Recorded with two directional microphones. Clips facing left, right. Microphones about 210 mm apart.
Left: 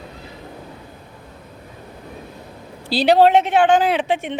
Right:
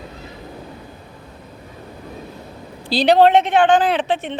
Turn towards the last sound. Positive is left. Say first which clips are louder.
# even
turn(degrees=10)  # may be behind; listen again after turning